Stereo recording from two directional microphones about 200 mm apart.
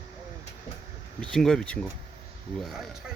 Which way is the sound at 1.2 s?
Centre (ahead or behind).